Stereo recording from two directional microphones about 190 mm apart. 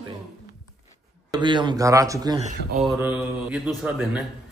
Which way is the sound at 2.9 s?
10° right (ahead or behind).